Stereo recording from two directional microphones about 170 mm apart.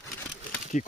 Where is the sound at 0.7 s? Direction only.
45° left (ahead or behind).